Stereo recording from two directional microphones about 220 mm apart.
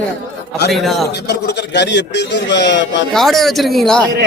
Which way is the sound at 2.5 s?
55° left (ahead or behind).